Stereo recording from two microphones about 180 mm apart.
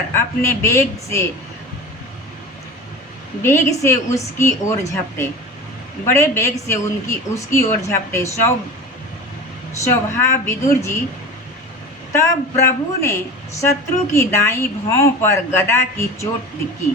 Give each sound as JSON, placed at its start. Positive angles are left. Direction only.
{"t": 0.2, "sound": "a woman's voice", "side_deg": 15}
{"t": 3.4, "sound": "a woman's voice", "side_deg": 15}
{"t": 9.8, "sound": "a woman's voice", "side_deg": 15}
{"t": 12.1, "sound": "a woman's voice", "side_deg": 15}